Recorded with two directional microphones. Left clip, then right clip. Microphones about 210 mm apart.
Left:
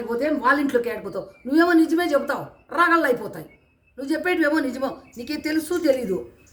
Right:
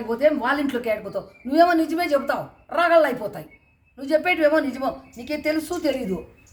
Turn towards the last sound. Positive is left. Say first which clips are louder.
# left 3 dB
turn(degrees=-10)  # may be behind; listen again after turning